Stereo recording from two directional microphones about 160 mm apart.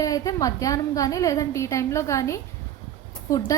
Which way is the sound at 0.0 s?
20° left (ahead or behind).